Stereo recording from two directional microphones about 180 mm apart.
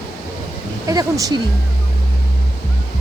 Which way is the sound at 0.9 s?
20° right (ahead or behind).